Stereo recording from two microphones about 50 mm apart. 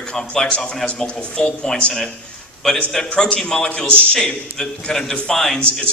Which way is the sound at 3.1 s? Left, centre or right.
Centre.